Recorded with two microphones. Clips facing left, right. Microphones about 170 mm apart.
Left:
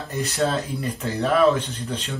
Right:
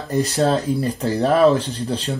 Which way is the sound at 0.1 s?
35° right (ahead or behind).